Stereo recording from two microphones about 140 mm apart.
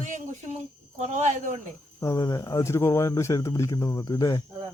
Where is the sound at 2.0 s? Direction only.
20° left (ahead or behind).